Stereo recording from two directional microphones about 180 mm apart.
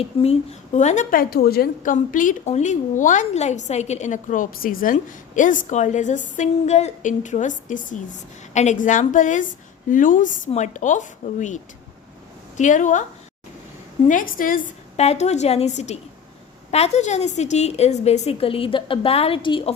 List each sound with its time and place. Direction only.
0.0 s a woman's voice: 35° left (ahead or behind)
14.1 s a woman's voice: 50° left (ahead or behind); by 19.7 s 30° left (ahead or behind)